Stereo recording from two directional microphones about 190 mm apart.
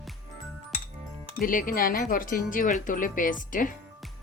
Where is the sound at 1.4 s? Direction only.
45° left (ahead or behind).